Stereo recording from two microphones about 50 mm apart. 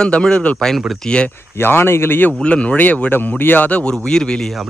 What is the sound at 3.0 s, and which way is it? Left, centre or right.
Speech, left.